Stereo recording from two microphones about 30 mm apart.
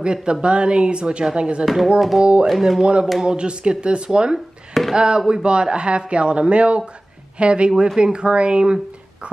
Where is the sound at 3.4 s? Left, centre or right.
Right.